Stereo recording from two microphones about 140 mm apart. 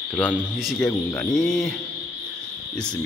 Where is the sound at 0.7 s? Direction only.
5° left (ahead or behind).